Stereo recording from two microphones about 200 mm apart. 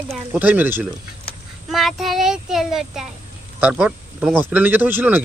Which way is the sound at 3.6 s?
5° right (ahead or behind).